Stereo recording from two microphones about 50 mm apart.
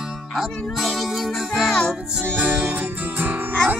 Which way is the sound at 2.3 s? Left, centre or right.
Right.